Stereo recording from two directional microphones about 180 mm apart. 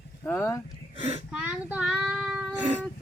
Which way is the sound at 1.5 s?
5° right (ahead or behind).